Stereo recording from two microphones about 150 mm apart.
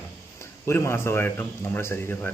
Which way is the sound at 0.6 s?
15° left (ahead or behind).